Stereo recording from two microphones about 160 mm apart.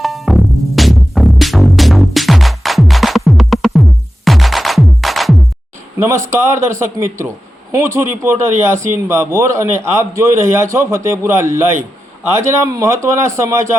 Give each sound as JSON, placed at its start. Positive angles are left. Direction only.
{"t": 0.0, "sound": "music", "side_deg": 0}
{"t": 6.3, "sound": "a man's voice", "side_deg": -15}